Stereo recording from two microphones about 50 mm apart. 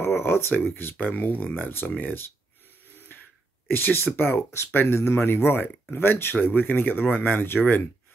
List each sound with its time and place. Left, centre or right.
0.0 s speech: left
3.7 s speech: left